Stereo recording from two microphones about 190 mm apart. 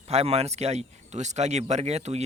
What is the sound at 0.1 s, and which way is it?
Speech, 35° right (ahead or behind).